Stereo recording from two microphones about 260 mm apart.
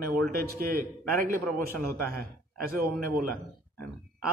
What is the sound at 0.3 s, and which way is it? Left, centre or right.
A man's voice, right.